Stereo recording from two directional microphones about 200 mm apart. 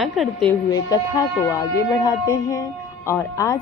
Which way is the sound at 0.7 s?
15° left (ahead or behind).